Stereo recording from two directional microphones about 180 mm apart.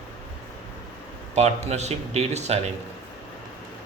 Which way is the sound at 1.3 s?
40° right (ahead or behind).